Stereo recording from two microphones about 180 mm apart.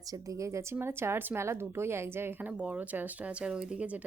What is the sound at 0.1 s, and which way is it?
A woman's voice, 20° right (ahead or behind).